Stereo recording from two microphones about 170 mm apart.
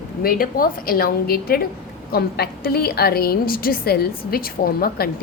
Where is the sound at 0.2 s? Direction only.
60° left (ahead or behind).